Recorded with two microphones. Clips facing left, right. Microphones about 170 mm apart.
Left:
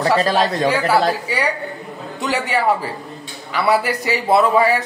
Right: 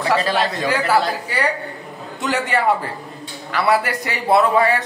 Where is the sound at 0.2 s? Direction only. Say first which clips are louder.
Left 3 dB; 40° left (ahead or behind).